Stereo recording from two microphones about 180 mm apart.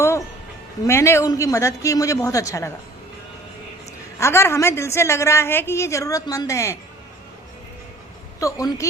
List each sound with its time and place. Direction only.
0.9 s a woman's voice: 15° left (ahead or behind)
4.2 s a woman's voice: 15° left (ahead or behind)
8.4 s a woman's voice: 15° left (ahead or behind)